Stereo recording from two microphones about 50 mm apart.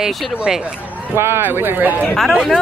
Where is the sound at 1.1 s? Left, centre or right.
Right.